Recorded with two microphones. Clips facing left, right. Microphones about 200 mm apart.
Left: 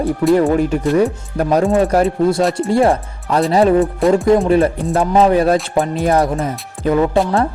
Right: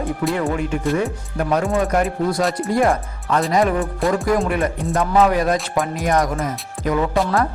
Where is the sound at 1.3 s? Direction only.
35° left (ahead or behind).